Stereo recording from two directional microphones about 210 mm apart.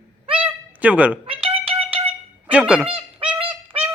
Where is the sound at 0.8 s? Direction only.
5° right (ahead or behind).